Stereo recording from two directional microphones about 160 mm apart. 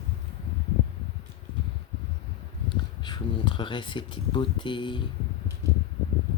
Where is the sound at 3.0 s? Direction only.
30° left (ahead or behind).